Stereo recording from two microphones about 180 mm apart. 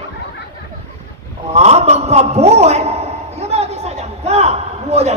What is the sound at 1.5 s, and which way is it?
A man's voice, 35° right (ahead or behind).